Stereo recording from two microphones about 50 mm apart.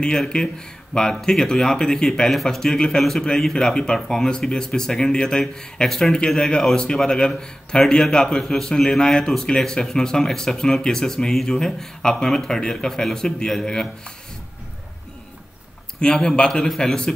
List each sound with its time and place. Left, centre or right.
0.3 s speech: centre
16.0 s speech: centre